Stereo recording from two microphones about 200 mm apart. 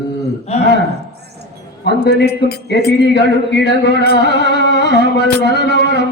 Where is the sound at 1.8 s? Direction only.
55° left (ahead or behind).